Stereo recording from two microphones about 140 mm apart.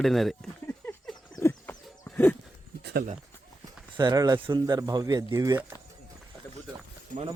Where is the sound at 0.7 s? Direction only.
10° left (ahead or behind).